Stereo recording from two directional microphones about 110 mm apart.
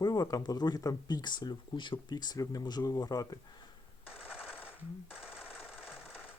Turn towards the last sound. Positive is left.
turn(degrees=-5)  # may be behind; listen again after turning